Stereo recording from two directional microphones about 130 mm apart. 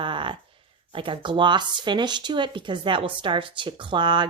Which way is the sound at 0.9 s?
40° right (ahead or behind).